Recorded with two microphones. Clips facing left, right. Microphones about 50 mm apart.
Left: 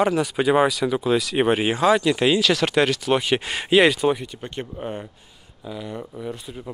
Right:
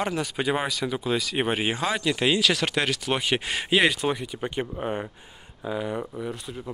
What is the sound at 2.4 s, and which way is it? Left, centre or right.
Speech, centre.